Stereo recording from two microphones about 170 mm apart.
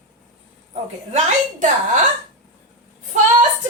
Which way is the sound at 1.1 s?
45° right (ahead or behind).